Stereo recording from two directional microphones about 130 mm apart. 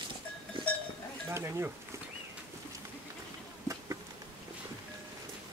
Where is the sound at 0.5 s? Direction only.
40° right (ahead or behind).